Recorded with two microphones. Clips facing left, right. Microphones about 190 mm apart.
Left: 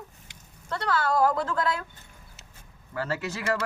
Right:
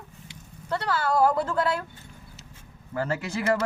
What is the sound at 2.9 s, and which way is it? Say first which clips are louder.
Speech: right 3 dB; 20° right (ahead or behind).